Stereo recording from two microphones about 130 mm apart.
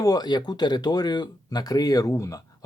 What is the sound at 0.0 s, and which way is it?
Speech, 30° left (ahead or behind).